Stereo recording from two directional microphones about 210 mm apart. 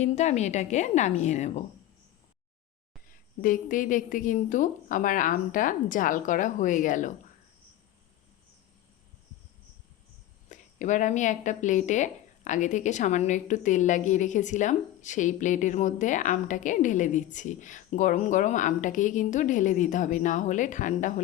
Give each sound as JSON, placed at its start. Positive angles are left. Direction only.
{"t": 0.0, "sound": "speech", "side_deg": 30}
{"t": 3.1, "sound": "speech", "side_deg": 40}
{"t": 10.5, "sound": "speech", "side_deg": 35}